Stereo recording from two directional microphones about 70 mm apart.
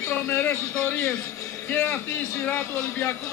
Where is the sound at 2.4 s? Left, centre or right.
Left.